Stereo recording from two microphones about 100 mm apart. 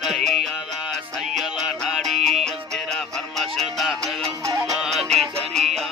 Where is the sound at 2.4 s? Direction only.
5° left (ahead or behind).